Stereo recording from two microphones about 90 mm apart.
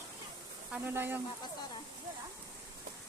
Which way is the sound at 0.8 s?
25° right (ahead or behind).